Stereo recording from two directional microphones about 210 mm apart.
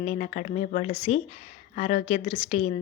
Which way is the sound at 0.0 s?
35° left (ahead or behind).